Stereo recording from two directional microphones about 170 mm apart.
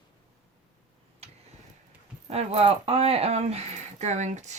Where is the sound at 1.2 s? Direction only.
35° right (ahead or behind).